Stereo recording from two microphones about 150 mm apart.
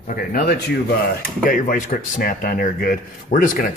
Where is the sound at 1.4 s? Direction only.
65° left (ahead or behind).